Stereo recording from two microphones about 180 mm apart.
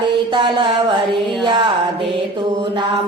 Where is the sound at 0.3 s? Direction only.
25° right (ahead or behind).